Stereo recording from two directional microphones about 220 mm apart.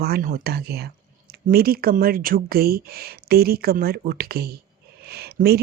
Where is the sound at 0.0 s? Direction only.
40° right (ahead or behind).